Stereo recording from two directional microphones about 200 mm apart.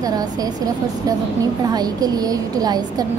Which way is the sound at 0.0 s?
20° right (ahead or behind).